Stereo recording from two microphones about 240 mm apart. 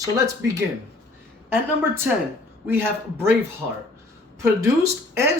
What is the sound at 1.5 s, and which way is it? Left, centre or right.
Speech, centre.